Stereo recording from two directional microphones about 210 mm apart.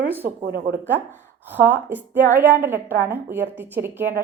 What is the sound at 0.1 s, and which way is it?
A woman's voice, 10° right (ahead or behind).